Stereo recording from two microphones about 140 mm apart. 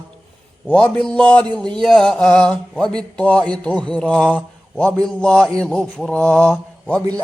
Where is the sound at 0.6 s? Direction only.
5° left (ahead or behind).